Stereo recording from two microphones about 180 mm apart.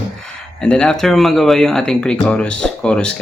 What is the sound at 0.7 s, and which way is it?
Speech, 5° left (ahead or behind).